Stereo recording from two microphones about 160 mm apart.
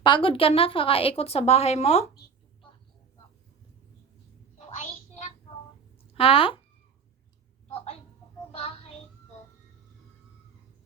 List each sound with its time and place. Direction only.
0.0 s a woman's voice: 30° left (ahead or behind)
4.5 s a sound: 45° left (ahead or behind)
6.1 s a woman's voice: 35° left (ahead or behind)